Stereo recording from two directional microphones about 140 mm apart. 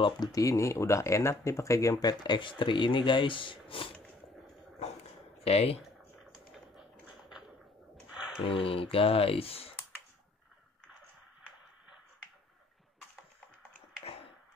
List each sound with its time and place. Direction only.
0.0 s speech: 25° left (ahead or behind)
5.4 s speech: 45° left (ahead or behind)
5.8 s typing: centre (ahead or behind)
8.4 s speech: 40° left (ahead or behind)